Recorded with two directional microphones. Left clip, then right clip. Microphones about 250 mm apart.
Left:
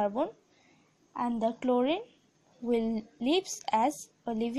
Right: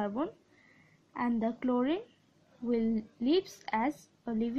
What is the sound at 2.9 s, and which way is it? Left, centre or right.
Speech, left.